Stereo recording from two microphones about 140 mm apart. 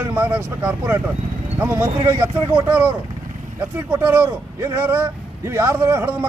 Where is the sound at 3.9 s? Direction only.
15° right (ahead or behind).